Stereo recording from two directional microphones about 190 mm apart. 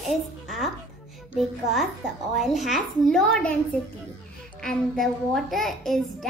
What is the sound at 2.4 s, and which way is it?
A child's voice, centre (ahead or behind).